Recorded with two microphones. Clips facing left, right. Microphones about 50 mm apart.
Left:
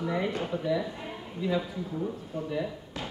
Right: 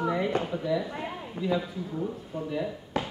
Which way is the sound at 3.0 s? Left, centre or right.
Right.